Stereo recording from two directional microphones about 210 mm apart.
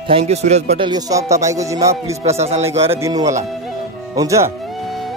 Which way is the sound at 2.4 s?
30° right (ahead or behind).